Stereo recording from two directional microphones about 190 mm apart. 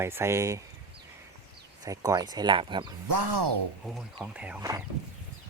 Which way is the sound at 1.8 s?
15° right (ahead or behind).